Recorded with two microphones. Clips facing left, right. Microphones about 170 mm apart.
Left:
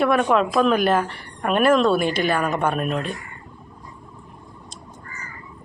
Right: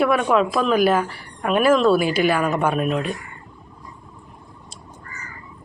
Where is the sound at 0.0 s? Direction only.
5° right (ahead or behind).